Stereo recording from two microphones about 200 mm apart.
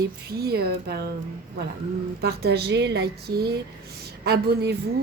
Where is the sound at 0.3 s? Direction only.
50° right (ahead or behind).